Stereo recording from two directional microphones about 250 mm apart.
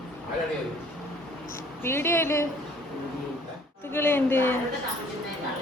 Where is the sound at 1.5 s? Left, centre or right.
Centre.